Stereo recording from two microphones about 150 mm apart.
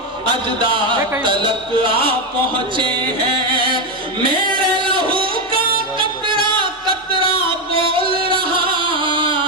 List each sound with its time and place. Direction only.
0.3 s speech: 35° right (ahead or behind)
4.5 s music: 35° right (ahead or behind)
8.0 s music: 90° right
8.3 s music: 35° right (ahead or behind)